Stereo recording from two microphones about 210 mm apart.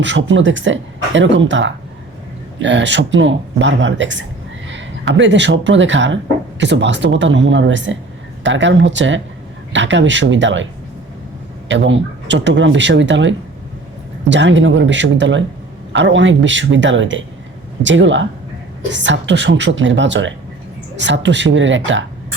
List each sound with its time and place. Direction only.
0.0 s a man's voice: 60° right (ahead or behind)
11.7 s speech: 60° right (ahead or behind)